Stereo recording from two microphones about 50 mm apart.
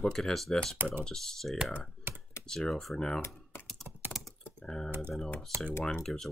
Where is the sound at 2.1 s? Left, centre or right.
Right.